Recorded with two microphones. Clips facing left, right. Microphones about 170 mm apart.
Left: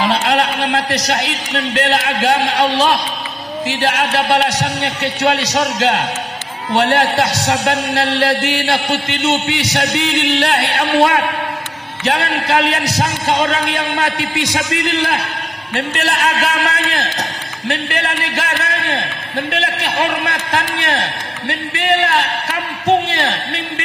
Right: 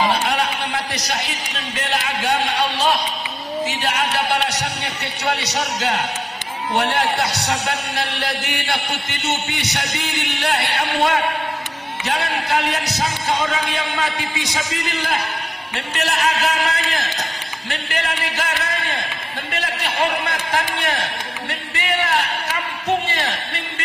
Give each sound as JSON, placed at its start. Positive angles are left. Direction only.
{"t": 0.1, "sound": "a man's voice", "side_deg": 70}
{"t": 15.7, "sound": "a man's voice", "side_deg": 55}